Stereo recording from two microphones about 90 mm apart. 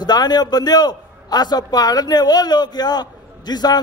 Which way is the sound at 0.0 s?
50° left (ahead or behind).